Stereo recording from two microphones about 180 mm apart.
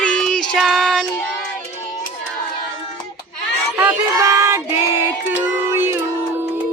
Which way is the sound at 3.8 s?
15° right (ahead or behind).